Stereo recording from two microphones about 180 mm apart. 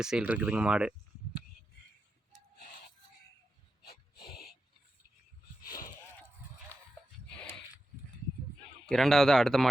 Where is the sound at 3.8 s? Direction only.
60° left (ahead or behind).